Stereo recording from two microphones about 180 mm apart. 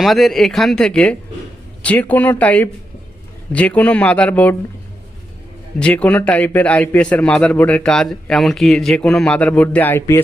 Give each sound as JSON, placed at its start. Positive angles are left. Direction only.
{"t": 0.0, "sound": "a man's voice", "side_deg": 0}
{"t": 5.8, "sound": "a man's voice", "side_deg": 5}